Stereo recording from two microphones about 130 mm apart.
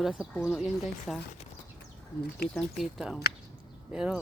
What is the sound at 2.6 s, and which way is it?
Speech, centre (ahead or behind).